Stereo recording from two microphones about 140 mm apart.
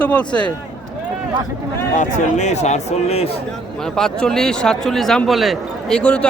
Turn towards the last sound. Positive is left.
turn(degrees=10)  # may be behind; listen again after turning